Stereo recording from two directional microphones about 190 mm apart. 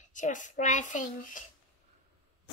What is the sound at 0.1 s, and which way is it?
Speech, 40° left (ahead or behind).